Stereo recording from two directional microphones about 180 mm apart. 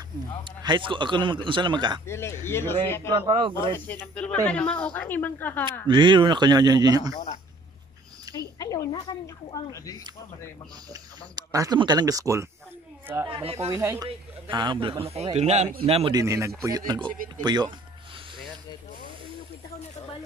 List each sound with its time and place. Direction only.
0.4 s speech: 25° right (ahead or behind)
2.0 s speech: 15° left (ahead or behind)
3.1 s speech: 25° right (ahead or behind)
3.7 s speech: 10° left (ahead or behind)
5.9 s speech: 25° right (ahead or behind)
8.5 s speech: 20° left (ahead or behind)
10.9 s speech: 20° right (ahead or behind)
13.3 s a man's voice: 30° right (ahead or behind)
13.7 s a man's voice: 15° right (ahead or behind); by 16.1 s 35° right (ahead or behind)
16.1 s speech: 20° right (ahead or behind)